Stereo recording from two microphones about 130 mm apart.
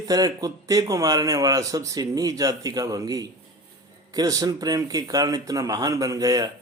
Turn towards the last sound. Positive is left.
turn(degrees=-30)  # may be behind; listen again after turning